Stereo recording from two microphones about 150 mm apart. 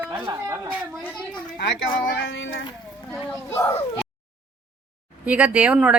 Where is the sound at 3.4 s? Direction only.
20° left (ahead or behind).